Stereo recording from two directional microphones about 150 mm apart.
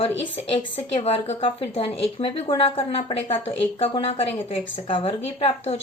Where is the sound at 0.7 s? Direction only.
40° left (ahead or behind).